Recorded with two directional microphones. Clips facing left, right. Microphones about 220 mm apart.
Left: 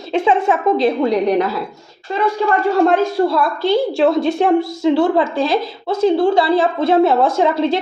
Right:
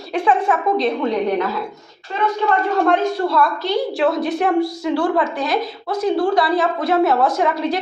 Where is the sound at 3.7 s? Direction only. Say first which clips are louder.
Left 7 dB; 25° left (ahead or behind).